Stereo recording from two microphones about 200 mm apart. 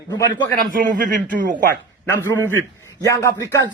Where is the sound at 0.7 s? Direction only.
45° right (ahead or behind).